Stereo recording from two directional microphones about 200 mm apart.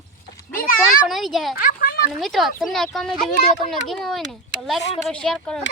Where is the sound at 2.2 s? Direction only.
Centre (ahead or behind).